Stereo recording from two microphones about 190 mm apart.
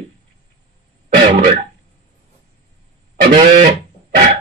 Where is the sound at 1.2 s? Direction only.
40° right (ahead or behind).